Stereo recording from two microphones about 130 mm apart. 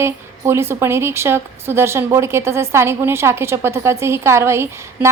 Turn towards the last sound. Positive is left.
turn(degrees=-20)  # may be behind; listen again after turning